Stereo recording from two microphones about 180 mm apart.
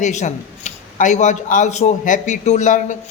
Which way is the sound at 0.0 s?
40° left (ahead or behind).